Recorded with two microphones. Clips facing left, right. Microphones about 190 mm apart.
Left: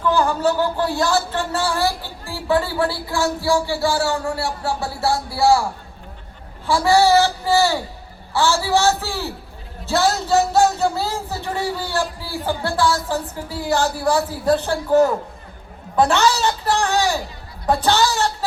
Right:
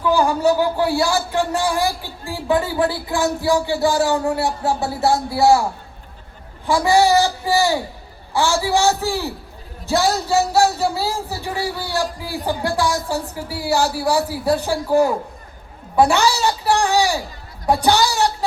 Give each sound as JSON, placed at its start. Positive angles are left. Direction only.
{"t": 0.0, "sound": "speech", "side_deg": -10}
{"t": 6.7, "sound": "speech", "side_deg": -15}